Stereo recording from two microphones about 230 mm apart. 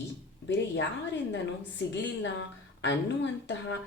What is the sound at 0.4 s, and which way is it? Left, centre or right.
Speech, left.